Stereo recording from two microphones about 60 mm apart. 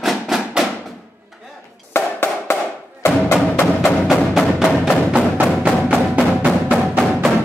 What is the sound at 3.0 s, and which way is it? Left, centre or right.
Music, left.